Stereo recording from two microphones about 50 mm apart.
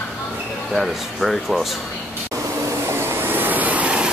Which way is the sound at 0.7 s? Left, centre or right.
Centre.